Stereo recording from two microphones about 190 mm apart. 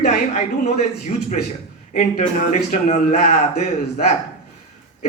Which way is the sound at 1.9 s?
40° left (ahead or behind).